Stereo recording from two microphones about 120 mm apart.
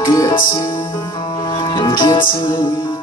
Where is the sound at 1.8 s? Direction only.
40° left (ahead or behind).